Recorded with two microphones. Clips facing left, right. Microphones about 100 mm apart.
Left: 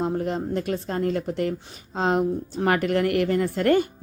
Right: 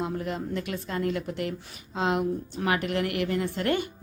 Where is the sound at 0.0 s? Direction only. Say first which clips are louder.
Left 5 dB; 40° left (ahead or behind).